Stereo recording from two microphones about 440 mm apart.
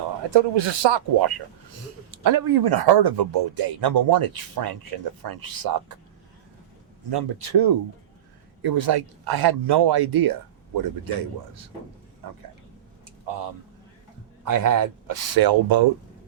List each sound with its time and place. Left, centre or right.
0.3 s speech: right
2.2 s speech: right
7.1 s speech: right
14.4 s speech: right